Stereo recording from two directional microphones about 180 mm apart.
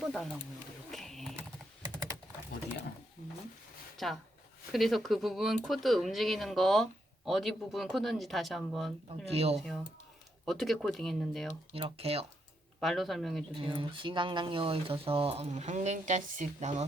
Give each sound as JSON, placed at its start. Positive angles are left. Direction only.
{"t": 0.0, "sound": "a sound", "side_deg": 0}
{"t": 3.9, "sound": "speech", "side_deg": 0}
{"t": 9.0, "sound": "speech", "side_deg": -35}
{"t": 9.6, "sound": "speech", "side_deg": 0}
{"t": 11.7, "sound": "speech", "side_deg": -30}
{"t": 12.8, "sound": "speech", "side_deg": 0}
{"t": 13.6, "sound": "speech", "side_deg": -30}